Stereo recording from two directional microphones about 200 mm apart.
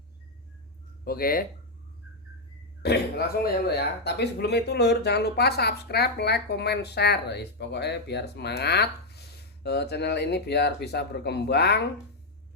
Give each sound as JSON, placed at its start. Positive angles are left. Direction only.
{"t": 1.0, "sound": "speech", "side_deg": 50}
{"t": 2.8, "sound": "speech", "side_deg": 55}